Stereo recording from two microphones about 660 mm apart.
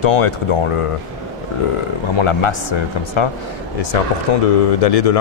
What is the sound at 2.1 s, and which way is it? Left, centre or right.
Speech, left.